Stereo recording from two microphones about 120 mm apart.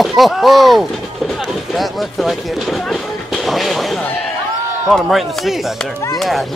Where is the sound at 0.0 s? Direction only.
Centre (ahead or behind).